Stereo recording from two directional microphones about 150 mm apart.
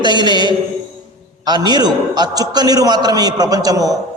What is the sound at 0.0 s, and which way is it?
A man's voice, 30° right (ahead or behind).